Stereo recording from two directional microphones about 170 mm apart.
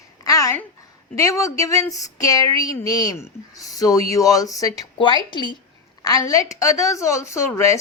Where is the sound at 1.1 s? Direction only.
20° left (ahead or behind).